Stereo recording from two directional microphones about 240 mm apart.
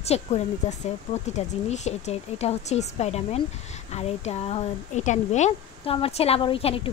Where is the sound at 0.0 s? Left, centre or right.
Left.